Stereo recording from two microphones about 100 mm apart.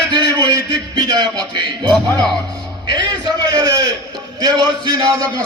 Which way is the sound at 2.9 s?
40° right (ahead or behind).